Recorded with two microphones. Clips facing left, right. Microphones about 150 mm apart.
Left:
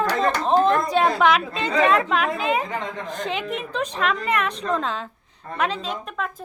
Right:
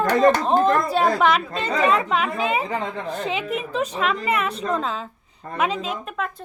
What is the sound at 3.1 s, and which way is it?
A woman's voice, 5° right (ahead or behind).